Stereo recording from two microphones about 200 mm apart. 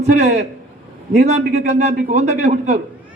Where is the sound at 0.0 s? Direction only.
35° right (ahead or behind).